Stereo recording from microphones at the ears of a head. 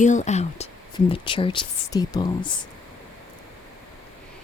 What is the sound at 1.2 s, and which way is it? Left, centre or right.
Speech, left.